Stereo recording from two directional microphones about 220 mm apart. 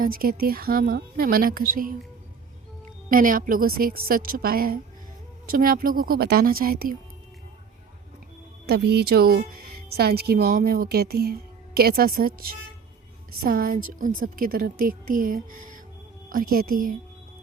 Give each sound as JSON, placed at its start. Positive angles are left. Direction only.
{"t": 0.0, "sound": "speech", "side_deg": -40}
{"t": 3.1, "sound": "speech", "side_deg": -40}
{"t": 8.6, "sound": "speech", "side_deg": -45}